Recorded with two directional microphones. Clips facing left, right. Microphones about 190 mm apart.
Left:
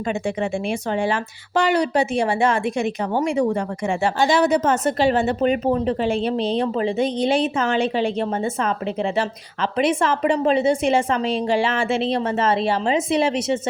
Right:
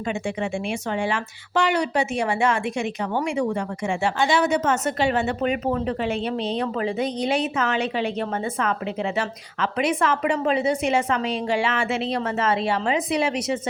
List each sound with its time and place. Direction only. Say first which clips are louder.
0.7 s a woman's voice: left 3 dB; 35° left (ahead or behind)